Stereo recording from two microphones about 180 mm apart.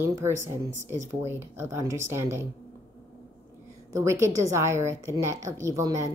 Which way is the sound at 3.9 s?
15° right (ahead or behind).